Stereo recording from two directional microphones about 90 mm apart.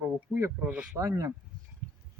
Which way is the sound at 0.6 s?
15° right (ahead or behind).